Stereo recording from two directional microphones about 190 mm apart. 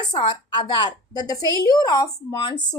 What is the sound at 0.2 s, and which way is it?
A woman's voice, 25° left (ahead or behind).